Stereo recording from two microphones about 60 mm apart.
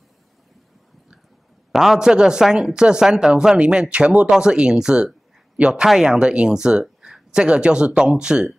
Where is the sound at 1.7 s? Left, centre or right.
Centre.